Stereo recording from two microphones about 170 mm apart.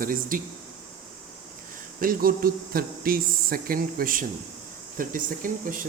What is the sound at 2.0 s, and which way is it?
Speech, 60° right (ahead or behind).